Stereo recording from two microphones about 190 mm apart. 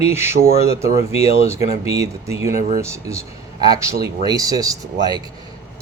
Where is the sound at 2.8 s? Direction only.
15° right (ahead or behind).